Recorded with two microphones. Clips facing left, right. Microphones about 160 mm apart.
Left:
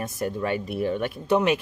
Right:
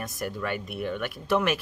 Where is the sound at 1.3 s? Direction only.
20° left (ahead or behind).